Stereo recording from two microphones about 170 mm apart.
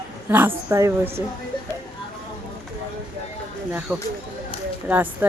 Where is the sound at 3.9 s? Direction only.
5° right (ahead or behind).